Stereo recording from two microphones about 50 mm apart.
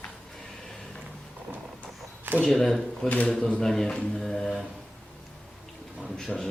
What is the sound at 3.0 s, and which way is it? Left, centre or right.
Speech, left.